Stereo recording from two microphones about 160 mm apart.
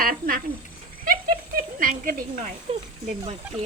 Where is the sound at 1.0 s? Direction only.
60° right (ahead or behind).